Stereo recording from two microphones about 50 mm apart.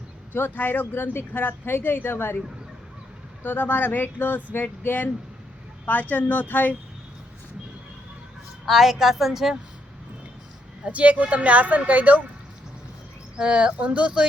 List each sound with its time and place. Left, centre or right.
0.3 s speech: left
3.4 s speech: left
8.6 s a woman's voice: centre
10.8 s speech: right
13.3 s speech: centre